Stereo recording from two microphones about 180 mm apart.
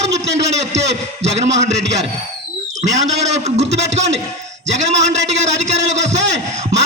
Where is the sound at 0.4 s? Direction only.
40° right (ahead or behind).